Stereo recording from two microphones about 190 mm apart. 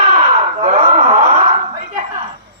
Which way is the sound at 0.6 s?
30° right (ahead or behind).